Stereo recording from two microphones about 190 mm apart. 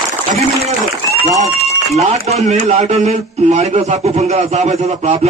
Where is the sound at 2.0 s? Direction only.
35° right (ahead or behind).